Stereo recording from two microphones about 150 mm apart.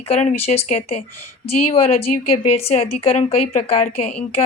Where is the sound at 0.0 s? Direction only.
50° left (ahead or behind).